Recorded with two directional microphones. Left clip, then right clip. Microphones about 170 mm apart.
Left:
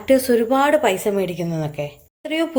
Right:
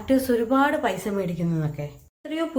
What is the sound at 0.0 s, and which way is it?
A woman's voice, 30° left (ahead or behind).